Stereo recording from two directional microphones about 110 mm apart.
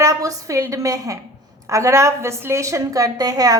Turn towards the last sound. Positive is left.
turn(degrees=-35)  # may be behind; listen again after turning